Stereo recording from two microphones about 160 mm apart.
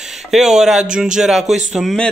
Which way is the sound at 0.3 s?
5° right (ahead or behind).